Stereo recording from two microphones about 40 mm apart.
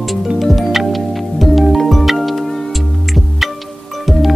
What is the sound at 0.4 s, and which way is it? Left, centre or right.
Music, centre.